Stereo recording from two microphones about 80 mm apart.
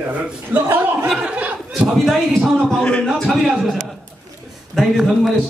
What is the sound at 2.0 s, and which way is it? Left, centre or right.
A man's voice, centre.